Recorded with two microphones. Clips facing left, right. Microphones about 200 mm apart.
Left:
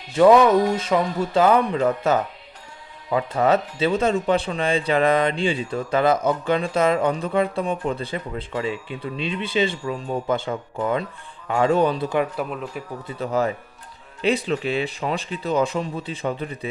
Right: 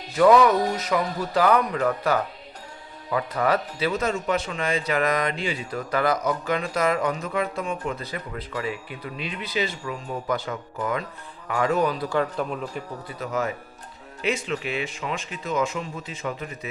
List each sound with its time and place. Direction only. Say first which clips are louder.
0.2 s speech: left 3 dB; 25° left (ahead or behind)
13.1 s speech: left 5 dB; 30° left (ahead or behind)